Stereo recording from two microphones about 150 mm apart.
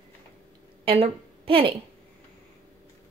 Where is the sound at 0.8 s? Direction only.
40° right (ahead or behind).